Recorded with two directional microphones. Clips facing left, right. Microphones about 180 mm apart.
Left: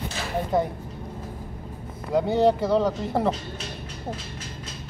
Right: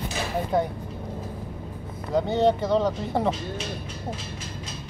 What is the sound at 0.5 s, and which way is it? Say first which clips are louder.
Speech: left 1 dB; centre (ahead or behind).